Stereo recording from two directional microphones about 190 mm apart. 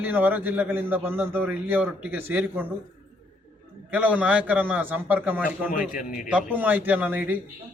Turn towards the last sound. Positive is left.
turn(degrees=-10)  # may be behind; listen again after turning